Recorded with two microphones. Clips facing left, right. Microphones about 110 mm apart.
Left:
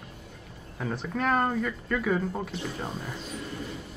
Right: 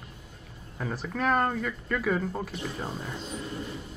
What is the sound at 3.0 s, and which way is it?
Vehicle, 25° right (ahead or behind).